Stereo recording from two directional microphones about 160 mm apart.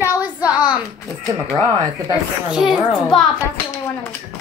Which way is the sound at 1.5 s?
25° right (ahead or behind).